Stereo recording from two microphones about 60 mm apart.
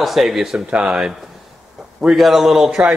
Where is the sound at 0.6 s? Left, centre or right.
Centre.